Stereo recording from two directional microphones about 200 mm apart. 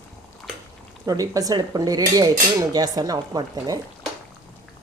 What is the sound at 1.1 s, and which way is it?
Speech, 15° right (ahead or behind).